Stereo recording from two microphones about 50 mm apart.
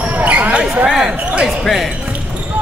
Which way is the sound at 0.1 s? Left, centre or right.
Right.